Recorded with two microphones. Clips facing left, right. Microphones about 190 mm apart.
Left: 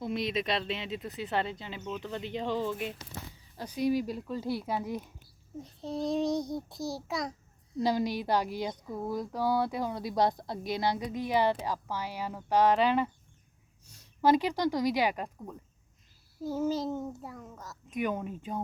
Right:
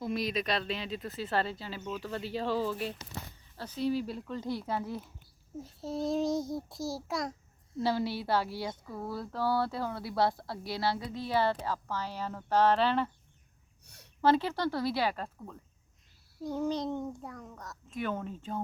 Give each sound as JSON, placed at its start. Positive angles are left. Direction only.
{"t": 0.0, "sound": "speech", "side_deg": 25}
{"t": 3.6, "sound": "speech", "side_deg": 15}
{"t": 5.5, "sound": "child singing", "side_deg": -5}
{"t": 7.8, "sound": "speech", "side_deg": 15}
{"t": 13.8, "sound": "a sound", "side_deg": -65}
{"t": 14.2, "sound": "speech", "side_deg": 15}
{"t": 16.4, "sound": "child singing", "side_deg": 5}
{"t": 17.9, "sound": "speech", "side_deg": 10}